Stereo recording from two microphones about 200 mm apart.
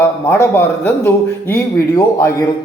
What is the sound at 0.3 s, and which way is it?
Speech, 10° left (ahead or behind).